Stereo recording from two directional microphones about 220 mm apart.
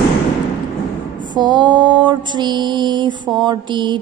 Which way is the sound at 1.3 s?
20° right (ahead or behind).